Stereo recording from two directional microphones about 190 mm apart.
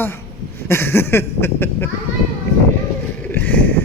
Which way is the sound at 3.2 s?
10° left (ahead or behind).